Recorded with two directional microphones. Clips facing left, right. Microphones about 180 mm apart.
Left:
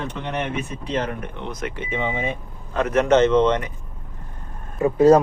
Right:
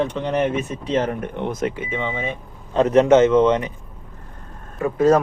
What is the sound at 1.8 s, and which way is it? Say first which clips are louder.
Speech: even; centre (ahead or behind).